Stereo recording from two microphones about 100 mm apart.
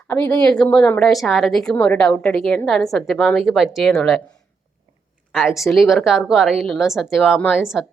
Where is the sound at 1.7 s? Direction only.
15° left (ahead or behind).